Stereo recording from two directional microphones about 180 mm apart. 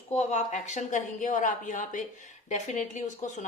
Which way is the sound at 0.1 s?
40° left (ahead or behind).